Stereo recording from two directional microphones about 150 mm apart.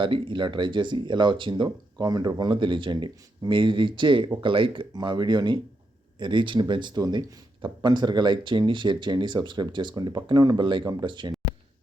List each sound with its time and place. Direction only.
0.0 s speech: 35° right (ahead or behind)